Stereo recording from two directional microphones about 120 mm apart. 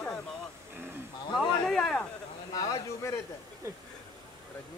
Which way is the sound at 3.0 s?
25° left (ahead or behind).